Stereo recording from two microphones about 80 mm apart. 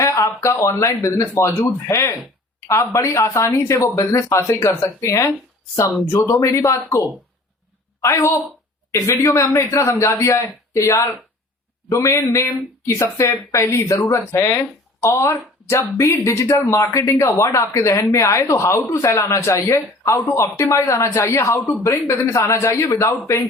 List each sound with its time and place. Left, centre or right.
0.0 s speech: left
6.3 s speech: left
8.0 s speech: left